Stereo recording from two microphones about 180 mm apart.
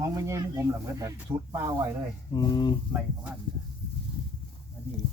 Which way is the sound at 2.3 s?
25° left (ahead or behind).